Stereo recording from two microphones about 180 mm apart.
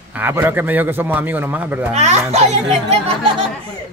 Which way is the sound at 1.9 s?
40° right (ahead or behind).